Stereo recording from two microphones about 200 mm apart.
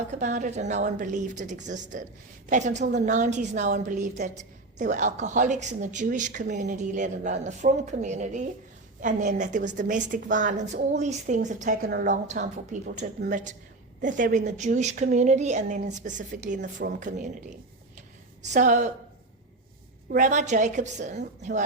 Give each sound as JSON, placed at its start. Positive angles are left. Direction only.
{"t": 0.1, "sound": "a woman's voice", "side_deg": -35}
{"t": 11.8, "sound": "a woman's voice", "side_deg": -50}
{"t": 18.4, "sound": "a woman's voice", "side_deg": -35}
{"t": 20.1, "sound": "a woman's voice", "side_deg": -40}